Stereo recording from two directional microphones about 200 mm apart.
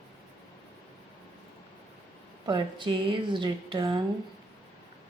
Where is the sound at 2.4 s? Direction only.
25° right (ahead or behind).